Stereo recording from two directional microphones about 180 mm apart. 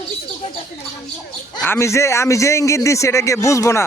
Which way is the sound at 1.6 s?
15° left (ahead or behind).